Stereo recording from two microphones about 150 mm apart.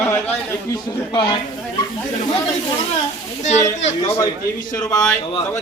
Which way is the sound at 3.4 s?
50° left (ahead or behind).